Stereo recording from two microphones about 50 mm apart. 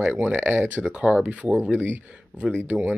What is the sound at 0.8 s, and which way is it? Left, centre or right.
Speech, right.